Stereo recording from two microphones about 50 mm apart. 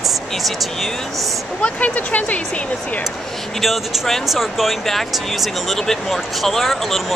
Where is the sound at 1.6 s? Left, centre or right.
Left.